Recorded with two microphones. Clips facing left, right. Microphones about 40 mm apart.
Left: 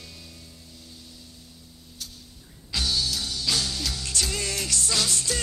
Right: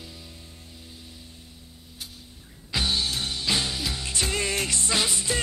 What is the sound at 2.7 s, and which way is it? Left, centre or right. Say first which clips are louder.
Music: right 1 dB; right.